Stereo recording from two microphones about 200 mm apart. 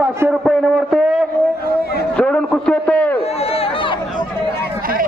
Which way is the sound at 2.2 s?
5° left (ahead or behind).